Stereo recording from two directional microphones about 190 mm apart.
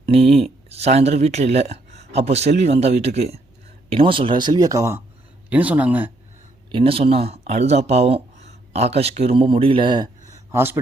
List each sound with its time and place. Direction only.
0.0 s a sound: 30° right (ahead or behind)
0.7 s speech: 35° right (ahead or behind); by 6.1 s 10° right (ahead or behind)
6.7 s speech: 30° right (ahead or behind)